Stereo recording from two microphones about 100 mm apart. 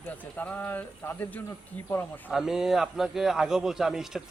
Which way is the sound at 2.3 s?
5° right (ahead or behind).